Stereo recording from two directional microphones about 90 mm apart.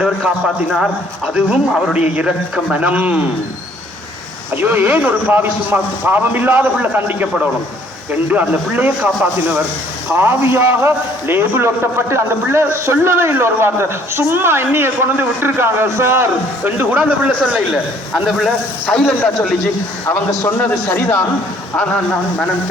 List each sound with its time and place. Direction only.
0.4 s a man's voice: centre (ahead or behind)
1.3 s speech: 10° right (ahead or behind)
4.5 s a man's voice: 20° right (ahead or behind)
18.1 s a man's voice: centre (ahead or behind)
20.7 s a man's voice: 20° left (ahead or behind)